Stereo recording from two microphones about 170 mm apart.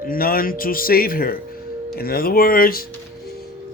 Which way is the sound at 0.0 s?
55° left (ahead or behind).